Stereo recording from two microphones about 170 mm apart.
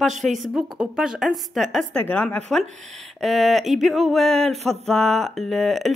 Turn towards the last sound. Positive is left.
turn(degrees=0)  # may be behind; listen again after turning